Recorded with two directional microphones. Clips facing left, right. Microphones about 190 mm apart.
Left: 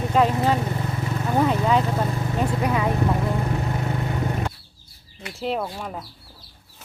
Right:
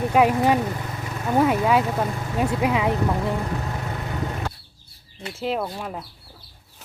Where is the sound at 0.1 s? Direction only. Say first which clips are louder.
Right 1 dB; 10° right (ahead or behind).